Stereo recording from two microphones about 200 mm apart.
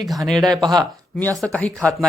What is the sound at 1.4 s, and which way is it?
Speech, 5° left (ahead or behind).